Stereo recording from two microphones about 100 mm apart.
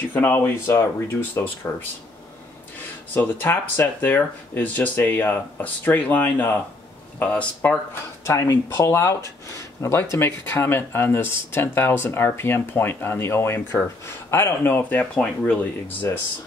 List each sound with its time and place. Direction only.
0.1 s speech: 20° left (ahead or behind)
3.2 s speech: 20° left (ahead or behind)
8.3 s speech: 25° left (ahead or behind)